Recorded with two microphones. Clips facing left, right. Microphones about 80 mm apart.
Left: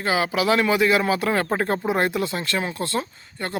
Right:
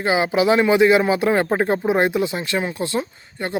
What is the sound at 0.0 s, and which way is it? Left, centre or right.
Speech, right.